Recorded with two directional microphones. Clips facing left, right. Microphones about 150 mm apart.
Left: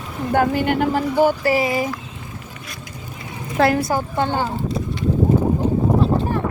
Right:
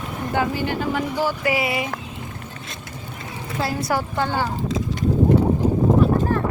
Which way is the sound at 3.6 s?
55° left (ahead or behind).